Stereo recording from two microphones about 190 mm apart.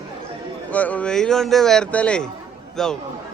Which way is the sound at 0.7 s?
5° left (ahead or behind).